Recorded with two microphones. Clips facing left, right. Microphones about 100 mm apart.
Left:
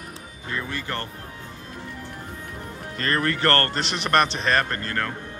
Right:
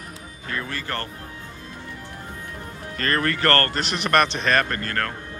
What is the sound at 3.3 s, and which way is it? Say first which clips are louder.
Speech: right 1 dB; 25° left (ahead or behind).